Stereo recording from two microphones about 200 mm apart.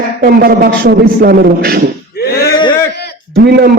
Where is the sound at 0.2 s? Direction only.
50° right (ahead or behind).